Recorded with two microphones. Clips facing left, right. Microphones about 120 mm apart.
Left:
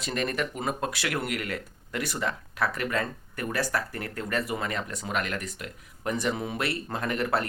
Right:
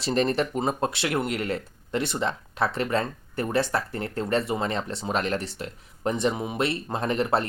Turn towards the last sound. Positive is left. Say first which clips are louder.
# right 3 dB
turn(degrees=-25)  # may be behind; listen again after turning